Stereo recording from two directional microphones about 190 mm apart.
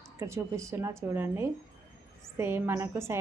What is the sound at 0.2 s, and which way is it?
Speech, 15° right (ahead or behind).